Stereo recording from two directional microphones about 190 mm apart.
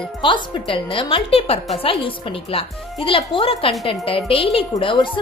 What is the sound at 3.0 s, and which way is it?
A woman's voice, 30° left (ahead or behind).